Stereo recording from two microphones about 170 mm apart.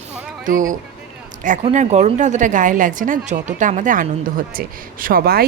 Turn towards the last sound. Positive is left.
turn(degrees=-65)  # may be behind; listen again after turning